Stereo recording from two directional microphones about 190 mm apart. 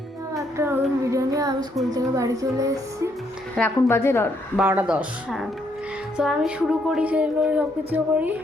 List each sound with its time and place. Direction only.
0.5 s child singing: 15° right (ahead or behind)
1.0 s a sound: 15° right (ahead or behind)
1.9 s speech: 15° right (ahead or behind)
3.5 s a woman's voice: 10° left (ahead or behind)
4.5 s speech: 10° right (ahead or behind)